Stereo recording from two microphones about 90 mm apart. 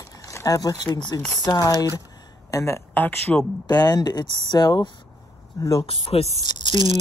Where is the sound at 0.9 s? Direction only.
55° left (ahead or behind).